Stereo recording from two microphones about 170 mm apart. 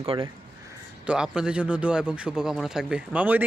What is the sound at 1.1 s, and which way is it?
A man's voice, 5° right (ahead or behind).